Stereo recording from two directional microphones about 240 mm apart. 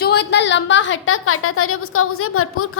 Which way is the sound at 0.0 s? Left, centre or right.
Left.